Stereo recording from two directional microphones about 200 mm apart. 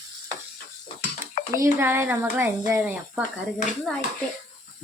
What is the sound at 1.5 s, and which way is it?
Speech, 10° right (ahead or behind).